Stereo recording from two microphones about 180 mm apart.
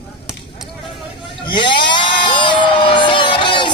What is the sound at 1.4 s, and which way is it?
Crowd, 25° left (ahead or behind).